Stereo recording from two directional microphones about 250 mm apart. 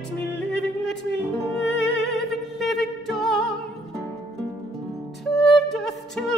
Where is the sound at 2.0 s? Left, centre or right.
Centre.